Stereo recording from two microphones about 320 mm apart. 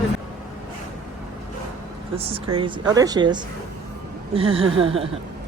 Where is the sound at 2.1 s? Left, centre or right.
Centre.